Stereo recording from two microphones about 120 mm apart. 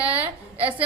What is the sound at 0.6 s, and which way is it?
Speech, 50° right (ahead or behind).